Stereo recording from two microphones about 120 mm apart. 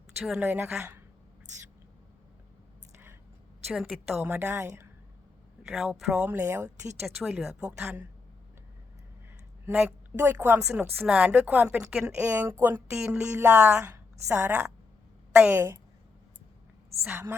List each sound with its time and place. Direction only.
0.3 s a woman's voice: 15° right (ahead or behind)
3.7 s speech: centre (ahead or behind)
4.2 s a woman's voice: 15° right (ahead or behind)
5.6 s speech: centre (ahead or behind)
6.2 s a woman's voice: 15° right (ahead or behind)
7.2 s speech: centre (ahead or behind)
9.7 s a woman's voice: 5° right (ahead or behind)
10.2 s a woman's voice: 15° right (ahead or behind)
10.9 s a woman's voice: 5° right (ahead or behind)
17.1 s a woman's voice: 20° right (ahead or behind)